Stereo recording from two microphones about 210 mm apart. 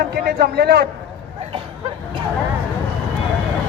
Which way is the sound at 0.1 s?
50° right (ahead or behind).